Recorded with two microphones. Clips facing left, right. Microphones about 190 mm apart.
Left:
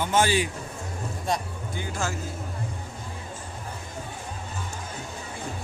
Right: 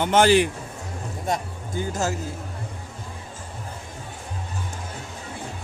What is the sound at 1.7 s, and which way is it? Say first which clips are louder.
Speech: right 6 dB; 40° right (ahead or behind).